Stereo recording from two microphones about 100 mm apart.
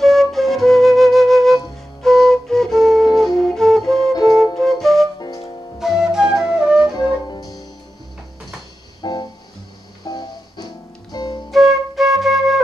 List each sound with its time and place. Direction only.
0.0 s flute: centre (ahead or behind)
3.2 s music: 5° left (ahead or behind)
4.2 s flute: centre (ahead or behind)
6.9 s music: 45° left (ahead or behind)
9.0 s music: 45° left (ahead or behind)
11.5 s flute: centre (ahead or behind)